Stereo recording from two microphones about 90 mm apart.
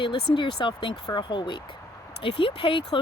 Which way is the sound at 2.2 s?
75° left (ahead or behind).